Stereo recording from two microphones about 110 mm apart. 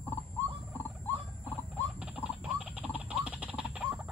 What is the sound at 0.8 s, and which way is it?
Wild animals, 20° left (ahead or behind).